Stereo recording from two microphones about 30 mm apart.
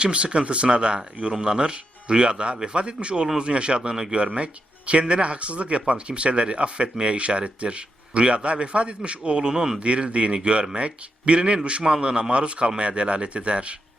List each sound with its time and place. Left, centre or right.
0.0 s a man's voice: right
9.8 s speech: right